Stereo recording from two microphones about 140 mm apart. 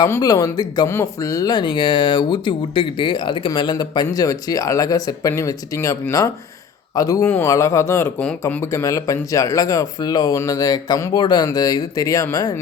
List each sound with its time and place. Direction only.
0.0 s speech: 25° left (ahead or behind)
8.2 s speech: 10° left (ahead or behind); by 12.5 s 25° left (ahead or behind)